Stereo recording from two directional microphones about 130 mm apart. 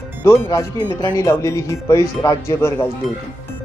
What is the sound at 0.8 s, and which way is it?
Speech, 30° left (ahead or behind).